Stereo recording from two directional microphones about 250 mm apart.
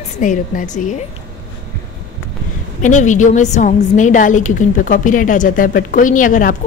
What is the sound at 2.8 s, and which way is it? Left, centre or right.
A woman's voice, left.